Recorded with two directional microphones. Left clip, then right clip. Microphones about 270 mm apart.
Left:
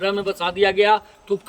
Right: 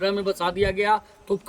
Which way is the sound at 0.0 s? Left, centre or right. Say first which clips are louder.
Left 2 dB; right.